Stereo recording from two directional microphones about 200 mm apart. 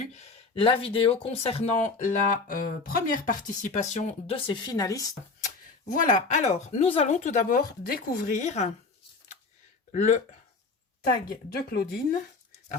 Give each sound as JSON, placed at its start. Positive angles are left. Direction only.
{"t": 0.0, "sound": "speech", "side_deg": 30}
{"t": 5.8, "sound": "speech", "side_deg": 40}
{"t": 9.9, "sound": "speech", "side_deg": 35}
{"t": 11.0, "sound": "speech", "side_deg": 50}